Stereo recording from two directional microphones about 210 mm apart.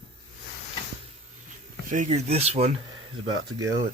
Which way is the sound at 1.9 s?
35° right (ahead or behind).